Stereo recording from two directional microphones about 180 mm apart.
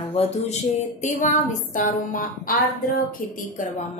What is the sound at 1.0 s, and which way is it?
A woman's voice, 45° left (ahead or behind).